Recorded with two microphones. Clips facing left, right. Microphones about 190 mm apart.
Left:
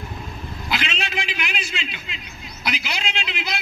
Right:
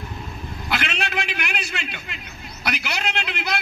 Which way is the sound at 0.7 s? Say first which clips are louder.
Right 1 dB; 65° right (ahead or behind).